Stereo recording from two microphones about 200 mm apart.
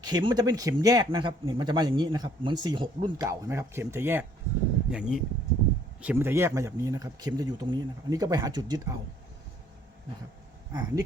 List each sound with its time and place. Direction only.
0.0 s speech: 20° right (ahead or behind)
10.7 s speech: 15° right (ahead or behind)